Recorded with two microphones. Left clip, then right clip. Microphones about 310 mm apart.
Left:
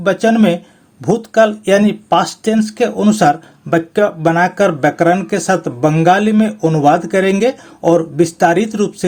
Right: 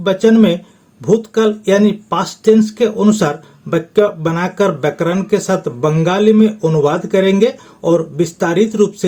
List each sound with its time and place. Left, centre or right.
0.0 s speech: left